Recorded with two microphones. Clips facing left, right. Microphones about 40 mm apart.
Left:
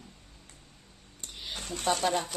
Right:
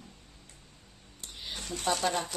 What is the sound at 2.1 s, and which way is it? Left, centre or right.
Speech, centre.